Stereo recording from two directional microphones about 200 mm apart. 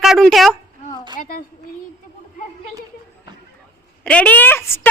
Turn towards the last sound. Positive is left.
turn(degrees=10)  # may be behind; listen again after turning